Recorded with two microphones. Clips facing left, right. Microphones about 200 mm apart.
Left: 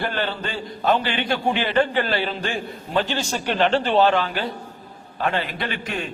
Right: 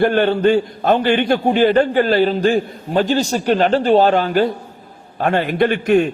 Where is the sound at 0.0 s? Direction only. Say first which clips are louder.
Right 13 dB; 50° right (ahead or behind).